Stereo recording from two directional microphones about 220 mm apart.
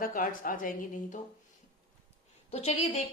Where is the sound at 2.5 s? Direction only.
30° left (ahead or behind).